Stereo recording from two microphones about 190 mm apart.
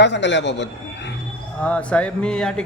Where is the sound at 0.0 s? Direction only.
70° left (ahead or behind).